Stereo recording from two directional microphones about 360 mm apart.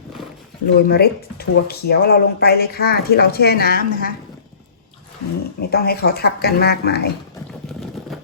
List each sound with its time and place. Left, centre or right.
0.8 s speech: left
5.5 s speech: left
7.7 s a sound: centre